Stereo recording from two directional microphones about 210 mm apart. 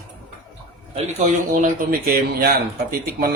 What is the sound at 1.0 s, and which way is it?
Speech, 30° right (ahead or behind).